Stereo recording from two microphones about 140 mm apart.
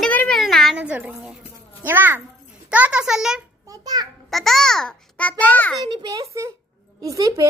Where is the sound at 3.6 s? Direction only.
25° right (ahead or behind).